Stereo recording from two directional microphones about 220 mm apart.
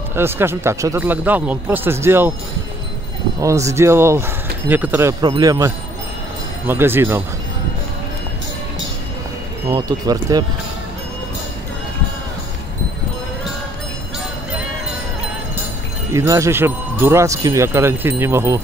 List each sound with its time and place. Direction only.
0.1 s speech: 10° right (ahead or behind)
3.3 s speech: 15° right (ahead or behind)
6.7 s speech: 10° right (ahead or behind)
9.7 s speech: 20° right (ahead or behind)
16.1 s speech: 15° right (ahead or behind)